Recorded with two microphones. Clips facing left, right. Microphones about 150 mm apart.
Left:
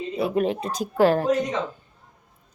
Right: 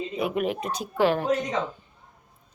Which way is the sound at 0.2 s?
30° left (ahead or behind).